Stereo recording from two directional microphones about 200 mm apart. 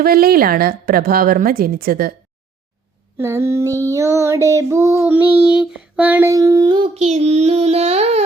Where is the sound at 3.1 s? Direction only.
15° right (ahead or behind).